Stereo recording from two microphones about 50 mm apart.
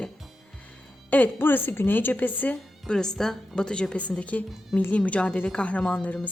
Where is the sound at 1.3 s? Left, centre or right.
Left.